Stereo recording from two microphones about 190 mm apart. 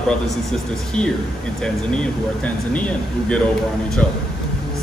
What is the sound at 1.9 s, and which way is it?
Speech, 5° left (ahead or behind).